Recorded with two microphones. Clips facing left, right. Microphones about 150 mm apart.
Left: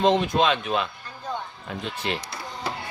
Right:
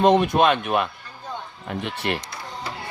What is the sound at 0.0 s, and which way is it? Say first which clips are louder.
A man's voice: right 4 dB; 55° right (ahead or behind).